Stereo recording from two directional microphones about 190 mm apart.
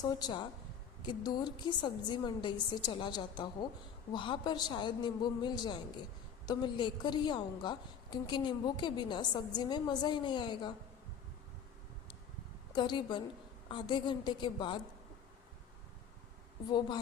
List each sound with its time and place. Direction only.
0.0 s a woman's voice: 20° left (ahead or behind)
12.7 s a woman's voice: 25° left (ahead or behind)